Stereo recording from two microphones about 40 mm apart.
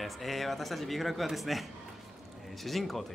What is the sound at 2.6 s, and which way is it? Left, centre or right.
Speech, centre.